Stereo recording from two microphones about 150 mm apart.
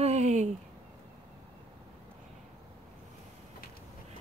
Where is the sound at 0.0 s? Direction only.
50° right (ahead or behind).